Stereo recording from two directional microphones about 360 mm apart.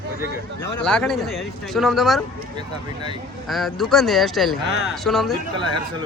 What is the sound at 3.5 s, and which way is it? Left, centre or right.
Speech, centre.